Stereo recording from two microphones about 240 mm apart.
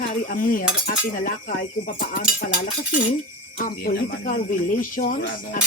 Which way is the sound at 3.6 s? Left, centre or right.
Left.